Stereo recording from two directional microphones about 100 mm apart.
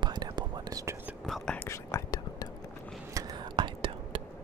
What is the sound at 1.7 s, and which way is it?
Whispering, 30° left (ahead or behind).